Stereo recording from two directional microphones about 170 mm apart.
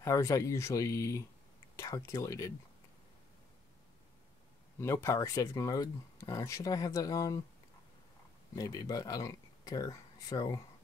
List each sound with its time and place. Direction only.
0.0 s speech: 15° left (ahead or behind)
4.7 s speech: 15° left (ahead or behind)
8.5 s speech: 20° left (ahead or behind)